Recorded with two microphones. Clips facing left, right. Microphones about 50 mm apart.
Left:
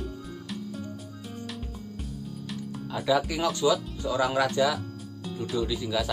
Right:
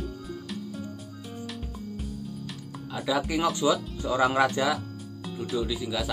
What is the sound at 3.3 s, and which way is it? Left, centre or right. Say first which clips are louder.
Speech: even; centre.